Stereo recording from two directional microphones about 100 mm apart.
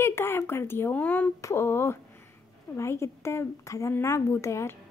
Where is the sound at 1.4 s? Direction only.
25° left (ahead or behind).